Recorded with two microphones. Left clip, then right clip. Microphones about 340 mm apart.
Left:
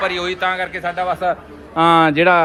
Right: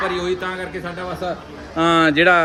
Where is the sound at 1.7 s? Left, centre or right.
Centre.